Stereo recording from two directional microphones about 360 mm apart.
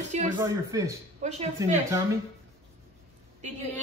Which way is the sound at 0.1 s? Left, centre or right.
Centre.